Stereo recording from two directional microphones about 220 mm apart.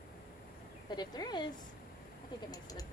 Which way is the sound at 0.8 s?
20° left (ahead or behind).